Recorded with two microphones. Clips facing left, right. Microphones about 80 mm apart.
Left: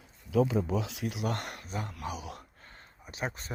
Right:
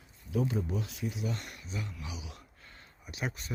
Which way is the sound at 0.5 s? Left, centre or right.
Left.